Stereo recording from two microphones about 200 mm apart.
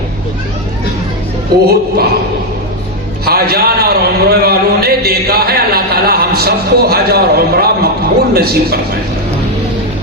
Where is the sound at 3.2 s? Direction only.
50° right (ahead or behind).